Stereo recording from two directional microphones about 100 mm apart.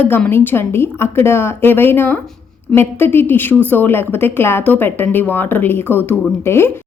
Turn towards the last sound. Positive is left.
turn(degrees=25)  # may be behind; listen again after turning